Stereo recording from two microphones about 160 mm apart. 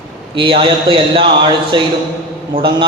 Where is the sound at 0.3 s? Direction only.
30° right (ahead or behind).